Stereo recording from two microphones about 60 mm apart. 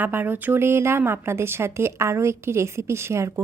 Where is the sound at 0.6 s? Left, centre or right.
Right.